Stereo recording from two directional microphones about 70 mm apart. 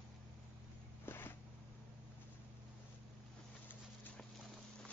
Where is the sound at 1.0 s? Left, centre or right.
Left.